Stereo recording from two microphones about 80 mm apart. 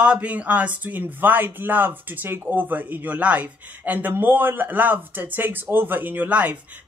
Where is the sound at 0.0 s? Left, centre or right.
Centre.